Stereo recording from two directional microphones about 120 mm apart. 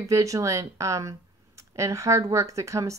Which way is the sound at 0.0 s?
25° right (ahead or behind).